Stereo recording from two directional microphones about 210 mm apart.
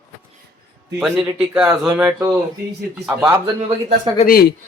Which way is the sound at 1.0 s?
5° right (ahead or behind).